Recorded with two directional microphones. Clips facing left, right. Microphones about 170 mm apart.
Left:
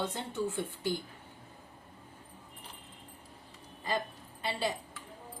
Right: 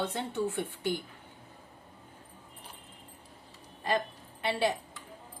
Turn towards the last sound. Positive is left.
turn(degrees=-65)  # may be behind; listen again after turning